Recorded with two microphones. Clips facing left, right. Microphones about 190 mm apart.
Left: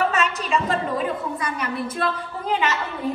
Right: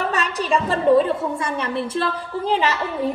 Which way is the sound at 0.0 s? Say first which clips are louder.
Left 1 dB; 35° right (ahead or behind).